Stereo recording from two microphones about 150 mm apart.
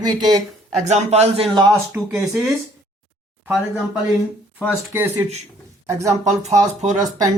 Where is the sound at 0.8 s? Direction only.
45° right (ahead or behind).